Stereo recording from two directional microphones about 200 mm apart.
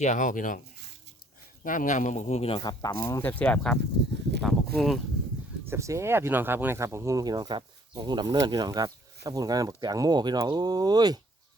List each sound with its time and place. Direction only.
0.0 s speech: 40° left (ahead or behind)
1.6 s speech: 40° left (ahead or behind); by 4.9 s centre (ahead or behind)
5.6 s speech: 15° right (ahead or behind)